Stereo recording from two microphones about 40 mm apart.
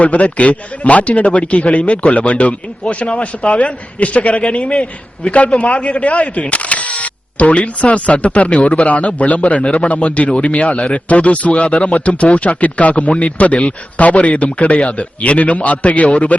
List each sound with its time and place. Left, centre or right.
0.0 s a man's voice: left